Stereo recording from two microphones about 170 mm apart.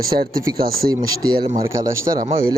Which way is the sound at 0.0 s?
60° right (ahead or behind).